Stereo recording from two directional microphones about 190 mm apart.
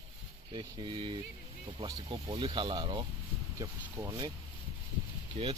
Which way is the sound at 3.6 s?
15° right (ahead or behind).